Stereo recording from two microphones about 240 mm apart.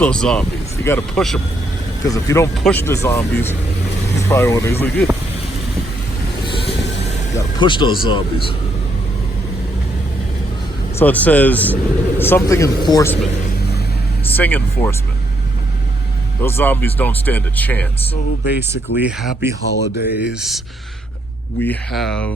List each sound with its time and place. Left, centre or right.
0.0 s speech: centre
2.0 s speech: centre
6.4 s vehicle: left
7.3 s speech: centre
10.9 s speech: centre
14.3 s speech: centre
16.4 s speech: centre
18.9 s speech: centre
19.7 s speech: left
21.6 s speech: centre